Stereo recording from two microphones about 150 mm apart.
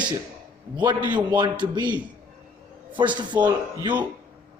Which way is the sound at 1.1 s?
30° right (ahead or behind).